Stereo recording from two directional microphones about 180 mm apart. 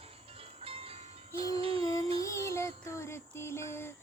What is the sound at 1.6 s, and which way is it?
Music, 30° right (ahead or behind).